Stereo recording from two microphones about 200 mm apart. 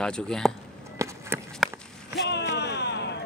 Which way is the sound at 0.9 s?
15° right (ahead or behind).